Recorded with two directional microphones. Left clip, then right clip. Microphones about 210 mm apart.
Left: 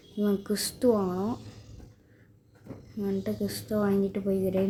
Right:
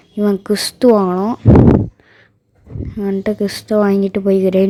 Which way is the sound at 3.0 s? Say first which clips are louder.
Right 14 dB; 40° right (ahead or behind).